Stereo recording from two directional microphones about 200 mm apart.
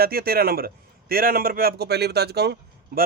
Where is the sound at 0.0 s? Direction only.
50° right (ahead or behind).